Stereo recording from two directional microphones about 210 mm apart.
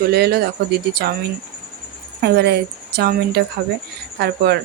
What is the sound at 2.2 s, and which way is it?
A woman's voice, 50° right (ahead or behind).